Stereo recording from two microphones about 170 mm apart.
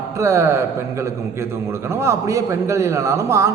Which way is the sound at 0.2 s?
15° right (ahead or behind).